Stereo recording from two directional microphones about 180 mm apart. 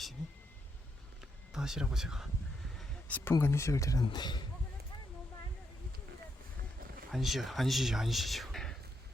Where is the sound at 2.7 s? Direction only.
5° left (ahead or behind).